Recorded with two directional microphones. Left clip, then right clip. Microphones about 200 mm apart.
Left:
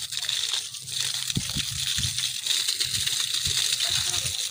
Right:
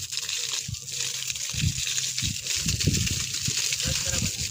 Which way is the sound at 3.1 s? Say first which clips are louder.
Left 3 dB; 10° right (ahead or behind).